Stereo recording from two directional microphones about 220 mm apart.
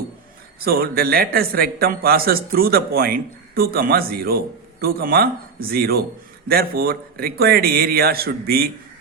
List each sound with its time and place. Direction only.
0.6 s a man's voice: 45° right (ahead or behind)